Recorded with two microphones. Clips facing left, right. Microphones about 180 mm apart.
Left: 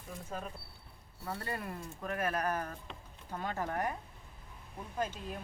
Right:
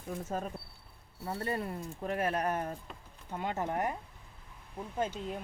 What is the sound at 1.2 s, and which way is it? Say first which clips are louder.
Speech: right 4 dB; 25° right (ahead or behind).